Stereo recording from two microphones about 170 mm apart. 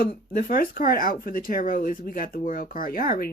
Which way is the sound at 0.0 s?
60° left (ahead or behind).